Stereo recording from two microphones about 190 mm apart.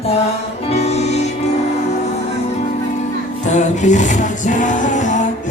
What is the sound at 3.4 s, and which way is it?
Music, 40° left (ahead or behind).